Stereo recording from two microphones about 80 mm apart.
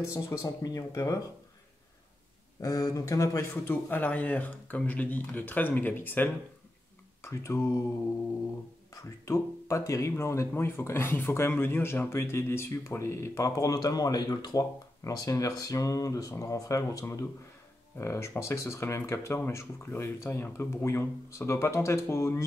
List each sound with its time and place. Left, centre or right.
0.0 s speech: left
2.6 s speech: left
3.6 s speech: left
8.9 s speech: left